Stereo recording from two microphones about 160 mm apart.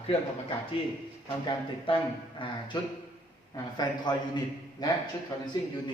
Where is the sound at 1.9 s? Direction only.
35° left (ahead or behind).